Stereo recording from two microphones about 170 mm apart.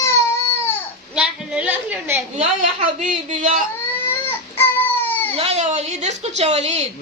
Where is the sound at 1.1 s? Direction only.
5° right (ahead or behind).